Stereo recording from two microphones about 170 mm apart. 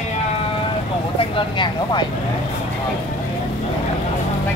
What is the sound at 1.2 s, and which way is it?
Speech, 30° left (ahead or behind).